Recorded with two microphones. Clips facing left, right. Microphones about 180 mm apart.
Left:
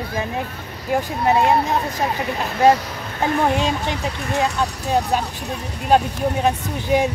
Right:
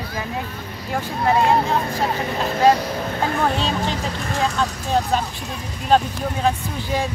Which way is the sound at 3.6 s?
15° left (ahead or behind).